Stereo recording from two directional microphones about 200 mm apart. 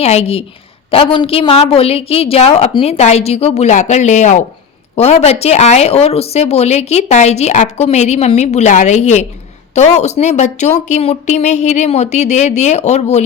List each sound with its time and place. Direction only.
0.0 s speech: 30° left (ahead or behind)